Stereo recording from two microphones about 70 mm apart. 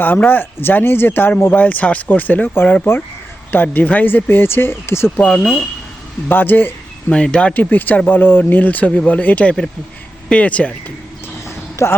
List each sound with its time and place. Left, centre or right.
0.0 s speech: left
5.1 s speech: centre
6.2 s speech: left
7.1 s speech: centre
7.6 s speech: left
11.4 s a sound: left